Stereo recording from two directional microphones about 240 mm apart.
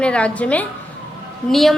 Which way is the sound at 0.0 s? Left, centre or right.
Centre.